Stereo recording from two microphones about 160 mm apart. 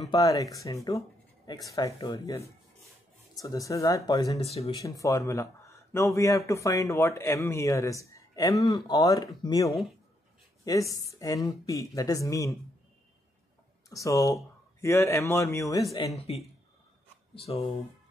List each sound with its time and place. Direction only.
0.1 s speech: 20° left (ahead or behind)
4.4 s speech: 40° left (ahead or behind)
4.7 s speech: 20° left (ahead or behind)
13.8 s speech: 20° left (ahead or behind)
17.5 s speech: 40° left (ahead or behind)